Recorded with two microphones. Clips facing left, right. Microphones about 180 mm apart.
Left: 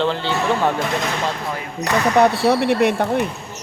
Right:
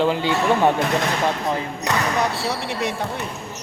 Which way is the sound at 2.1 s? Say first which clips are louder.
Left 9 dB; 60° left (ahead or behind).